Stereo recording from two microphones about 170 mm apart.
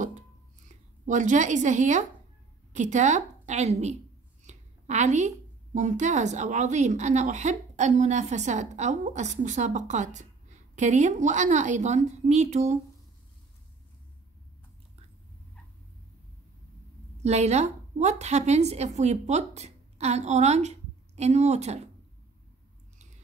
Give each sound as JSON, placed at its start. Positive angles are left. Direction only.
{"t": 0.7, "sound": "a woman's voice", "side_deg": -45}
{"t": 17.2, "sound": "a woman's voice", "side_deg": -40}